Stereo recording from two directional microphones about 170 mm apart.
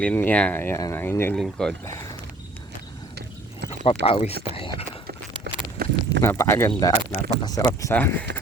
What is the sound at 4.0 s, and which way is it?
Speech, 35° left (ahead or behind).